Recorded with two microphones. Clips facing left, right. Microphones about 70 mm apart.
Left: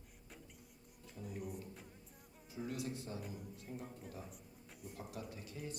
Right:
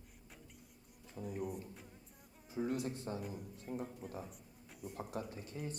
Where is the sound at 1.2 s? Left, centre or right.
Centre.